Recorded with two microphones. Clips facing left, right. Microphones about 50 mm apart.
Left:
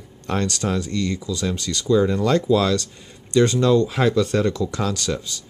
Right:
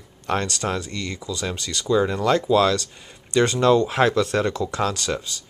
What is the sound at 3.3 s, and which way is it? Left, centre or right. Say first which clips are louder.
Speech: left 1 dB; right.